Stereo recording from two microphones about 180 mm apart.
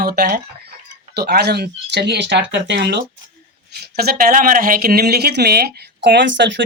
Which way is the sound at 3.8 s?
60° right (ahead or behind).